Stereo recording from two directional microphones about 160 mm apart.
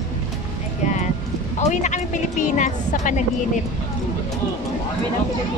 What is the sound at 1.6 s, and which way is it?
A woman's voice, 45° left (ahead or behind).